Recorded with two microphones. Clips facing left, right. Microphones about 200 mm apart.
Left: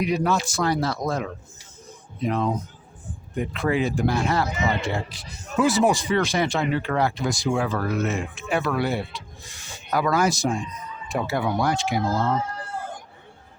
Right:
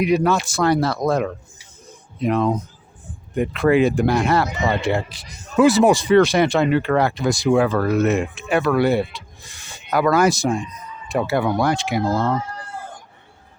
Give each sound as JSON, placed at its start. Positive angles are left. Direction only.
{"t": 0.0, "sound": "speech", "side_deg": -70}